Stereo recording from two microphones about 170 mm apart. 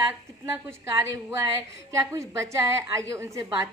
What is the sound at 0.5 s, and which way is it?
A woman's voice, 15° right (ahead or behind).